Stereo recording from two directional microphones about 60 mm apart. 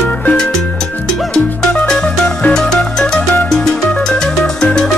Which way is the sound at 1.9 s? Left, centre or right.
Centre.